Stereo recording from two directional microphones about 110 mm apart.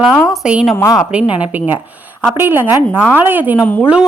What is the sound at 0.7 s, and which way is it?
Speech, 25° left (ahead or behind).